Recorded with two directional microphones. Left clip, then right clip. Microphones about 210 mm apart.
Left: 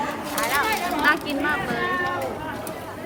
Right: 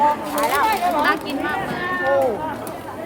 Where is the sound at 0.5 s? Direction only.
30° right (ahead or behind).